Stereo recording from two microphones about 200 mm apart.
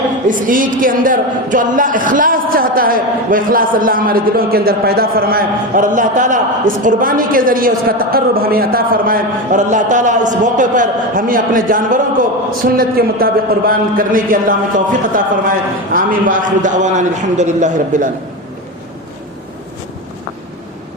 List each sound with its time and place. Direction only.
0.3 s a man's voice: 40° right (ahead or behind)